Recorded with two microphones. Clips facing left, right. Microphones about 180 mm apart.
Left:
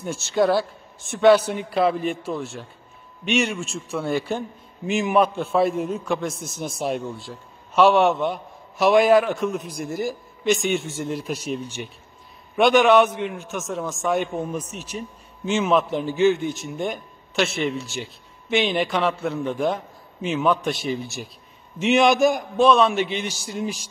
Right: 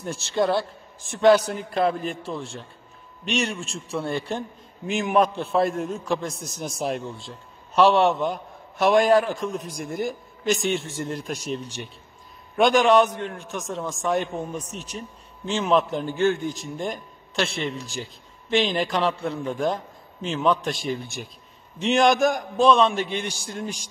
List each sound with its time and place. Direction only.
0.0 s a man's voice: centre (ahead or behind)
14.6 s speech: 35° right (ahead or behind)
15.4 s a man's voice: 5° left (ahead or behind)